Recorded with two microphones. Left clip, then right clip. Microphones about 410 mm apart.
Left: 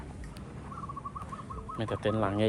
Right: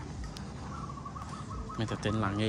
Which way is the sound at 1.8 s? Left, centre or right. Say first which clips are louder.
Left 3 dB; centre.